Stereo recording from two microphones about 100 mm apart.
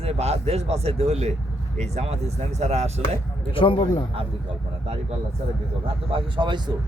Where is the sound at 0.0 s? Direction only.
85° right.